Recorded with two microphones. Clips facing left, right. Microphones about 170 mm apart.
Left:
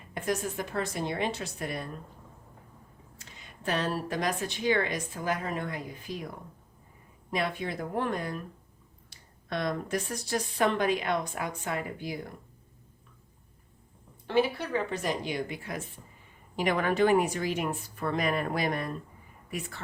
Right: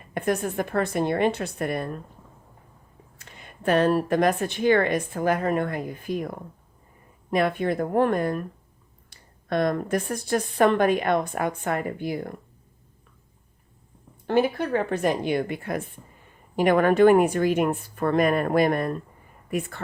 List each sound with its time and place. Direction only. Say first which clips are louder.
0.1 s a woman's voice: right 6 dB; 60° right (ahead or behind)
3.2 s a woman's voice: right 6 dB; 55° right (ahead or behind)
14.3 s a woman's voice: right 5 dB; 50° right (ahead or behind)